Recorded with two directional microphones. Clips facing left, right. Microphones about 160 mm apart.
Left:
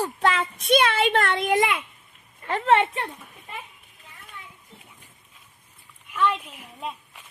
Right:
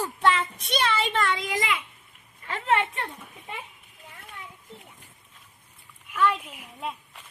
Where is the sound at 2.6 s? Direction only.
30° left (ahead or behind).